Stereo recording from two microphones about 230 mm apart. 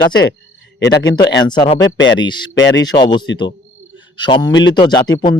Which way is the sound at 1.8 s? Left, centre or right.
Left.